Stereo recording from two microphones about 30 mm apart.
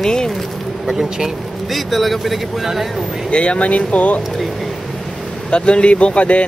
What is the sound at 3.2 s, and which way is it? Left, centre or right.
Speech, left.